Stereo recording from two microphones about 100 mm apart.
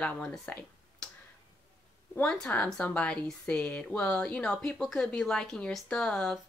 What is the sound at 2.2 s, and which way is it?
A woman's voice, 10° left (ahead or behind).